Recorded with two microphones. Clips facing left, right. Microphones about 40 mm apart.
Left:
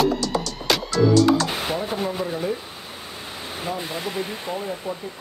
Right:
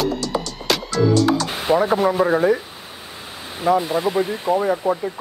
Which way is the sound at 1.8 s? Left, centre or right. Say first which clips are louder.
Right 9 dB; right.